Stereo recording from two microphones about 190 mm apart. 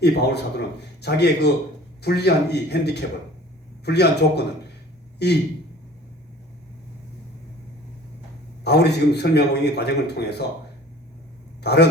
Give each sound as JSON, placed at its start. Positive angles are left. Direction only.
{"t": 0.0, "sound": "a man's voice", "side_deg": 60}
{"t": 8.6, "sound": "a man's voice", "side_deg": 60}
{"t": 11.6, "sound": "speech", "side_deg": 60}